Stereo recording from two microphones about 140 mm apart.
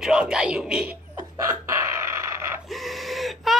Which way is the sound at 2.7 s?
Centre (ahead or behind).